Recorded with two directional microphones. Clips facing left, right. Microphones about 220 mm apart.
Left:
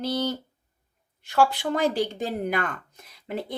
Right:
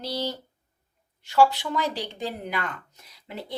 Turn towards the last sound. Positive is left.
turn(degrees=50)  # may be behind; listen again after turning